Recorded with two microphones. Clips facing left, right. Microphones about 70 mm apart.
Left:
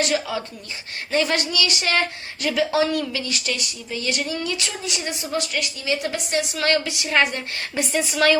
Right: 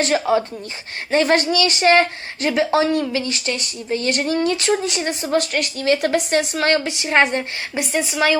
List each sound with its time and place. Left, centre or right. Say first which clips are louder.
0.0 s speech: right 6 dB; right
6.6 s a woman's voice: right 3 dB; right
7.9 s speech: even; centre